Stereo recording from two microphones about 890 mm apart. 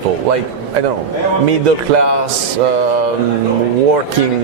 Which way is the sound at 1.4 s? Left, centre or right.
Right.